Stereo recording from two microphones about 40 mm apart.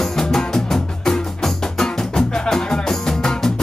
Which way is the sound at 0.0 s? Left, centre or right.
Centre.